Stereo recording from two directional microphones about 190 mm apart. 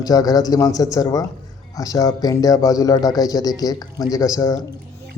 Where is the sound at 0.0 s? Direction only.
20° left (ahead or behind).